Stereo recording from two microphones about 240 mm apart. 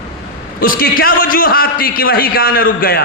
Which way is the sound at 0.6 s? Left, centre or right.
Left.